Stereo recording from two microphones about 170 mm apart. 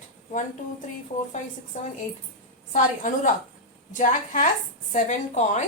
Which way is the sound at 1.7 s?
45° left (ahead or behind).